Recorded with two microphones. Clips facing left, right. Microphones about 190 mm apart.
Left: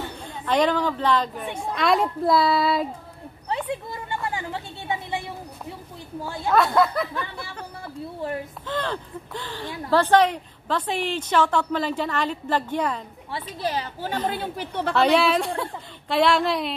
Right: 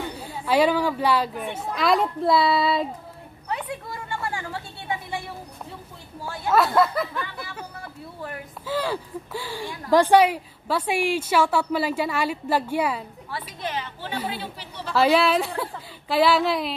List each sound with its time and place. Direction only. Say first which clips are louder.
0.2 s a woman's voice: right 1 dB; 5° right (ahead or behind)
3.4 s a sound: left 3 dB; 25° left (ahead or behind)
6.5 s a woman's voice: even; centre (ahead or behind)
8.6 s a woman's voice: right 4 dB; 10° right (ahead or behind)
13.6 s a woman's voice: left 5 dB; 35° left (ahead or behind)
14.3 s a woman's voice: left 6 dB; 50° left (ahead or behind)
15.0 s a woman's voice: right 1 dB; centre (ahead or behind)